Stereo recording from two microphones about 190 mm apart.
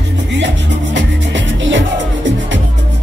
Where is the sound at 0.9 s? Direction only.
75° right (ahead or behind).